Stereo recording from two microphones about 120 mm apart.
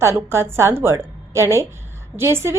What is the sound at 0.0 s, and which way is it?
A woman's voice, 20° right (ahead or behind).